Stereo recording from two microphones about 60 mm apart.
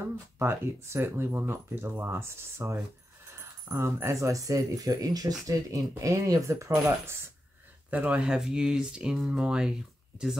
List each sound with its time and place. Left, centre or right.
0.4 s speech: right
7.9 s speech: right